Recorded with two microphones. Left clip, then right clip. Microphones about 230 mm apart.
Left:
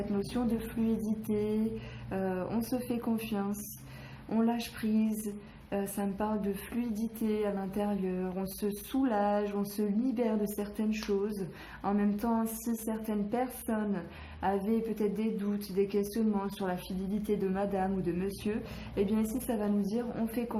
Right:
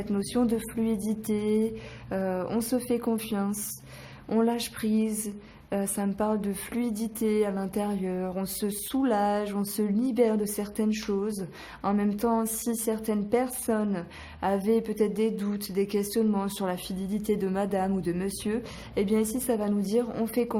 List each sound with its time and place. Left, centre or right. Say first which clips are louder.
0.2 s speech: right 9 dB; right